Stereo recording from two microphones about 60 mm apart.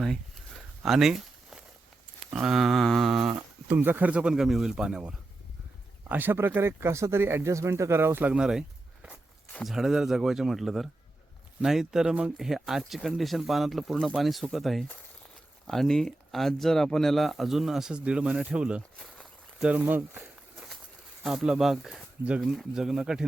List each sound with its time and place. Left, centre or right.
0.0 s a sound: centre
2.3 s speech: centre
3.7 s speech: right; by 5.1 s centre
6.1 s speech: right
8.3 s speech: centre
9.6 s speech: centre
17.9 s speech: centre
18.9 s walk: centre
19.6 s speech: right
20.1 s walk: centre
21.2 s speech: centre